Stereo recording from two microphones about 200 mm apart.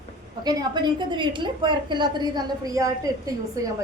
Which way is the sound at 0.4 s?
20° right (ahead or behind).